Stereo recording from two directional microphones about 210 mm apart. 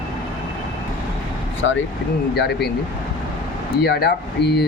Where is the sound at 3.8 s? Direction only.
50° left (ahead or behind).